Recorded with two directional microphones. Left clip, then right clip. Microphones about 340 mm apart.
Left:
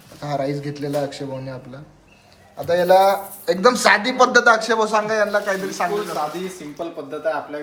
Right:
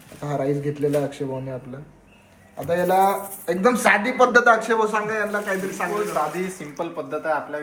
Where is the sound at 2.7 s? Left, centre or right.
Centre.